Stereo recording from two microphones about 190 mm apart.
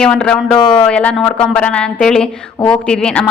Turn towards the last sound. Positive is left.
turn(degrees=5)  # may be behind; listen again after turning